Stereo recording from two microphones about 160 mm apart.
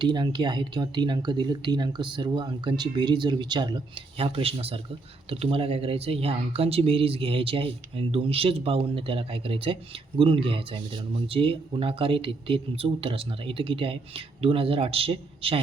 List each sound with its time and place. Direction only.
0.0 s speech: 30° right (ahead or behind)